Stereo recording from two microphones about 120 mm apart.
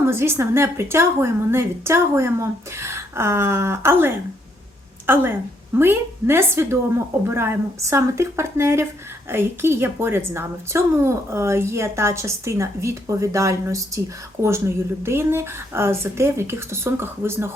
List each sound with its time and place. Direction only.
0.0 s speech: 20° right (ahead or behind)
15.0 s speech: 20° right (ahead or behind)